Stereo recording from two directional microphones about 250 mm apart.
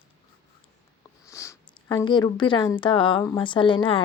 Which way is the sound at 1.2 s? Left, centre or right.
Centre.